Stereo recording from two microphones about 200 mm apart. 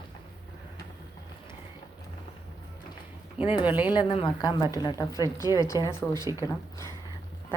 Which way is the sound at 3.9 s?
25° left (ahead or behind).